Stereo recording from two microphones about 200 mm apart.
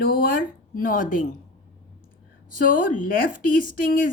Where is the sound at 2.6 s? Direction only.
45° left (ahead or behind).